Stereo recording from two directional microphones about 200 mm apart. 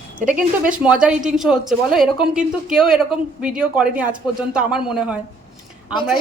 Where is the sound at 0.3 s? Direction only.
5° right (ahead or behind).